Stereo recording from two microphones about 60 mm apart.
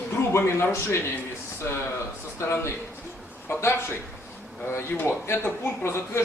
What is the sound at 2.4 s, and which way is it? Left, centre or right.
Speech, left.